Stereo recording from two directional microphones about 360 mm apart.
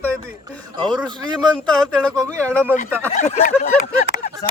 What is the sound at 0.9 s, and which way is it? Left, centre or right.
Speech, centre.